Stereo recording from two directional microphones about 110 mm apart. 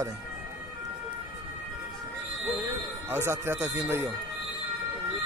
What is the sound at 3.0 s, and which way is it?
A man's voice, 20° right (ahead or behind).